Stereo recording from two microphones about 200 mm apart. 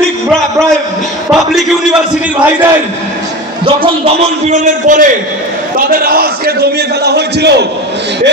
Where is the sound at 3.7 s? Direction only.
30° right (ahead or behind).